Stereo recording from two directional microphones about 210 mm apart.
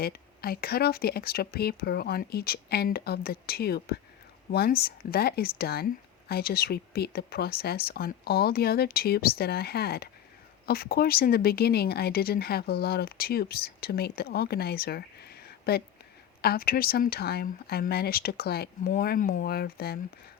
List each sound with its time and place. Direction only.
0.0 s speech: 45° left (ahead or behind)